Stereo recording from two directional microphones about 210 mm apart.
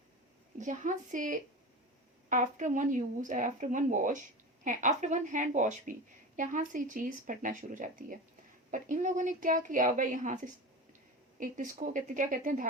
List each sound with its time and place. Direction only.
0.6 s a woman's voice: 35° right (ahead or behind)